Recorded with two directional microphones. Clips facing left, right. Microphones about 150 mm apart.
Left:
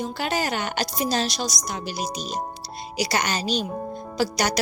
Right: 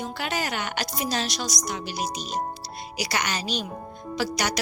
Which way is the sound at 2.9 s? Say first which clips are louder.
Left 4 dB; 30° left (ahead or behind).